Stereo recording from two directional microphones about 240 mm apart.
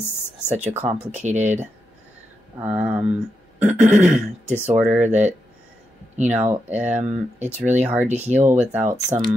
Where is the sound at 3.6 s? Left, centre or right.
Right.